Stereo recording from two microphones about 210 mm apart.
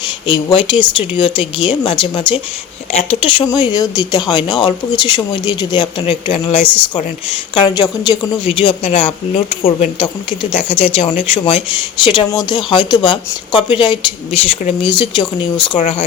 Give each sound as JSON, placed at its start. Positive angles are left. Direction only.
{"t": 0.3, "sound": "speech", "side_deg": 25}
{"t": 15.8, "sound": "speech", "side_deg": 35}